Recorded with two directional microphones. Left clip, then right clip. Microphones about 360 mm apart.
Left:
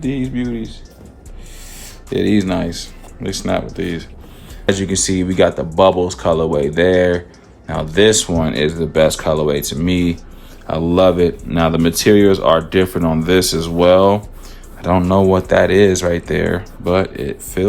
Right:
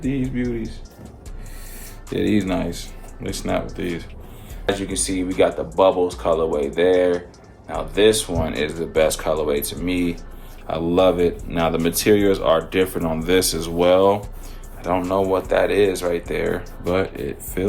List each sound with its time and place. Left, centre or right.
0.0 s speech: centre
2.1 s speech: left
4.6 s speech: left